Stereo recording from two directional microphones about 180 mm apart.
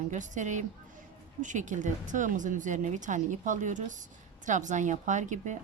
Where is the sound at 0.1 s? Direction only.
45° right (ahead or behind).